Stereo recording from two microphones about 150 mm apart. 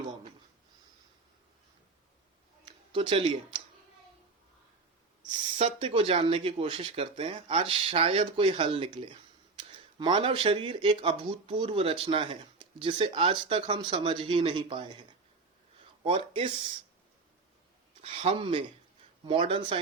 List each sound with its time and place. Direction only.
2.9 s speech: 35° right (ahead or behind)
5.5 s speech: 40° right (ahead or behind)
16.0 s speech: 40° right (ahead or behind)
18.0 s speech: 40° right (ahead or behind)